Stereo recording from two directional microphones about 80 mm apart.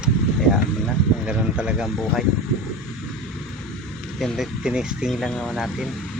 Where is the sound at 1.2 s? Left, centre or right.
Centre.